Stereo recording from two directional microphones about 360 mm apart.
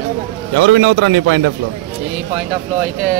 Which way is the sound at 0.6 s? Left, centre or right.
Right.